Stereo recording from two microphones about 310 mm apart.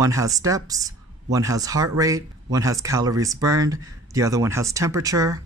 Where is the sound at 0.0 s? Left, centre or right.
Centre.